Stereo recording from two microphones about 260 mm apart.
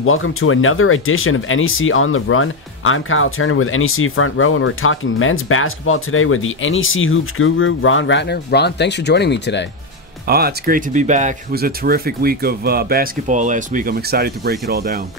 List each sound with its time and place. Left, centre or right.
0.0 s speech: left
10.2 s speech: right